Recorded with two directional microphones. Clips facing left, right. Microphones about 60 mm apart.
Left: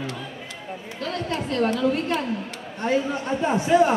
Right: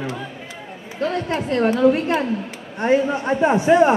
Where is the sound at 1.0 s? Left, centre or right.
Right.